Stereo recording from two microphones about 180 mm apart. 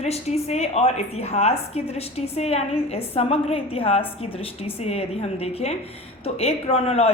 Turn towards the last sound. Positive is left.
turn(degrees=35)  # may be behind; listen again after turning